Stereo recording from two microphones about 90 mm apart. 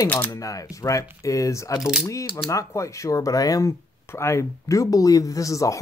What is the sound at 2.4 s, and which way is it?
Speech, 35° left (ahead or behind).